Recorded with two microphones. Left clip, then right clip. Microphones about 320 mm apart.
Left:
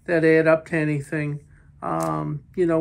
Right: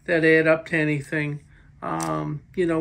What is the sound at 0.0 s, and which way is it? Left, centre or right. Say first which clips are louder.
Speech: left 1 dB; centre.